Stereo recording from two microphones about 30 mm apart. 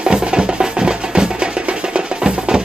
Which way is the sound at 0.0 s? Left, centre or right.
Right.